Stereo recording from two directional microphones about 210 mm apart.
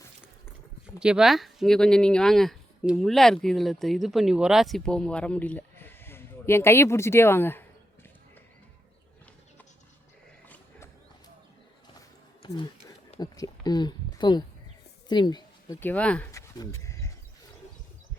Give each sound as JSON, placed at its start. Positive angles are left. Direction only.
{"t": 0.9, "sound": "speech", "side_deg": -5}
{"t": 13.1, "sound": "a woman's voice", "side_deg": 20}
{"t": 15.8, "sound": "speech", "side_deg": 5}